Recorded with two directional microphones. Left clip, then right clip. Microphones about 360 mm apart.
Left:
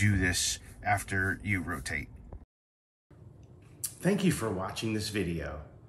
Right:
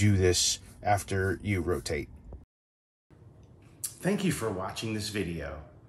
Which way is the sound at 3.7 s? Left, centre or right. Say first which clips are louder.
Left 1 dB; centre.